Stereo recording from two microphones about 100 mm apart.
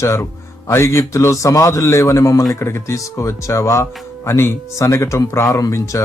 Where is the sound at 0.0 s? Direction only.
30° left (ahead or behind).